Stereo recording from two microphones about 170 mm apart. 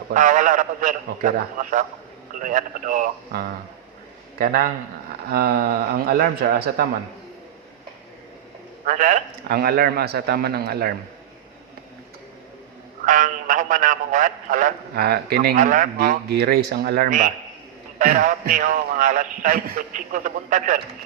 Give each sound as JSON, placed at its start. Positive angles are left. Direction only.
{"t": 0.1, "sound": "a man's voice", "side_deg": -50}
{"t": 2.4, "sound": "a man's voice", "side_deg": -50}
{"t": 8.8, "sound": "a man's voice", "side_deg": -45}
{"t": 9.5, "sound": "a man's voice", "side_deg": -65}
{"t": 13.1, "sound": "a man's voice", "side_deg": -50}
{"t": 15.5, "sound": "a man's voice", "side_deg": -50}
{"t": 16.3, "sound": "a man's voice", "side_deg": -70}